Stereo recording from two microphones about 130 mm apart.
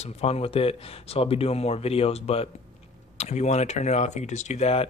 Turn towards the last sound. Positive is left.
turn(degrees=55)  # may be behind; listen again after turning